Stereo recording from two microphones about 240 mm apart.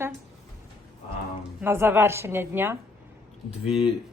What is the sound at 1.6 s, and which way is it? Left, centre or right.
A woman's voice, centre.